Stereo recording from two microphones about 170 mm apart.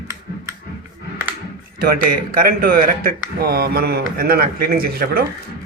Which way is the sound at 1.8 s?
60° right (ahead or behind).